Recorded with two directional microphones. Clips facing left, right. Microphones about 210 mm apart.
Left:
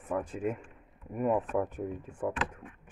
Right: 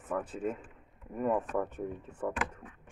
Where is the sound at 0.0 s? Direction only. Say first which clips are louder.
Left 2 dB; 10° left (ahead or behind).